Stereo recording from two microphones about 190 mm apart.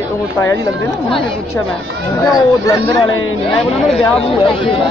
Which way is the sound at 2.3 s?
20° left (ahead or behind).